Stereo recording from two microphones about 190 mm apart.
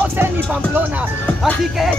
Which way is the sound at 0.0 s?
10° right (ahead or behind).